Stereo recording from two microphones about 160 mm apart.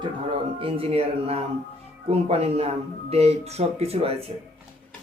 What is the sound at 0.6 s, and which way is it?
Speech, 40° right (ahead or behind).